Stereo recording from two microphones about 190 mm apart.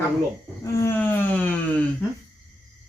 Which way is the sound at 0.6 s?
15° left (ahead or behind).